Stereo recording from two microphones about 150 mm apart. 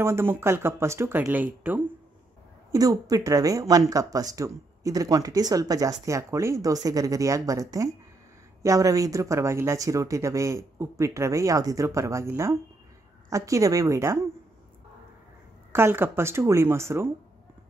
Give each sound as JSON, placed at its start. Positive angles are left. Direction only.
{"t": 0.0, "sound": "speech", "side_deg": -15}
{"t": 2.7, "sound": "a woman's voice", "side_deg": -25}
{"t": 15.7, "sound": "speech", "side_deg": -15}